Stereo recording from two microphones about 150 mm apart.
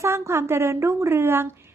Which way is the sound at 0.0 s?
20° right (ahead or behind).